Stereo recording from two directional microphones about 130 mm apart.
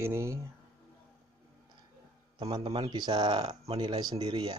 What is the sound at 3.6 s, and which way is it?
Speech, 45° right (ahead or behind).